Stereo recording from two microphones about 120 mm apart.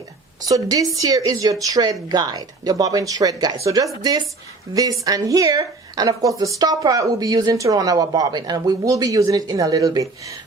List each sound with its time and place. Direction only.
0.4 s a woman's voice: 30° right (ahead or behind)